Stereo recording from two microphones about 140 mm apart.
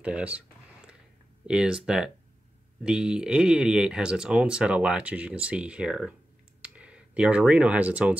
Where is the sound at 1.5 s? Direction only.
5° right (ahead or behind).